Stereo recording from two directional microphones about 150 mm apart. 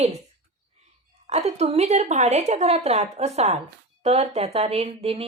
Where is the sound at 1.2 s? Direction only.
45° right (ahead or behind).